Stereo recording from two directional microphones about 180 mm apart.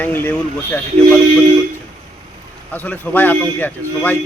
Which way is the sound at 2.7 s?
10° left (ahead or behind).